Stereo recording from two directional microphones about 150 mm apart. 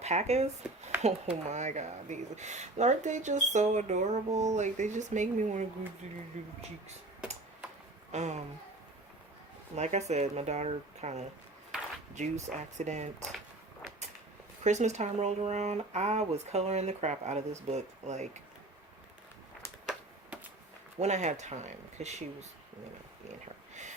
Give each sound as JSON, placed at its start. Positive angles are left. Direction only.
{"t": 0.0, "sound": "speech", "side_deg": -45}
{"t": 8.1, "sound": "speech", "side_deg": -50}
{"t": 9.7, "sound": "speech", "side_deg": -50}
{"t": 14.6, "sound": "speech", "side_deg": -50}
{"t": 19.8, "sound": "a sound", "side_deg": -5}
{"t": 21.0, "sound": "speech", "side_deg": -50}